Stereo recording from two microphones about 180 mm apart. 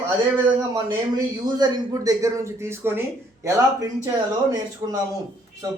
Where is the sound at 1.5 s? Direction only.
20° right (ahead or behind).